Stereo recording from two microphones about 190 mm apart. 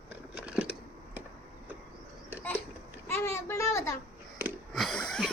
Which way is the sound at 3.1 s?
15° left (ahead or behind).